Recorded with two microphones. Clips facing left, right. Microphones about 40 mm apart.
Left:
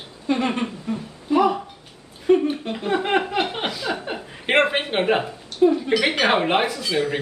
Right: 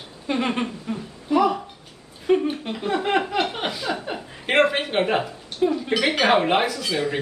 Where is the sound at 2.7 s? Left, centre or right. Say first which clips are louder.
Even; centre.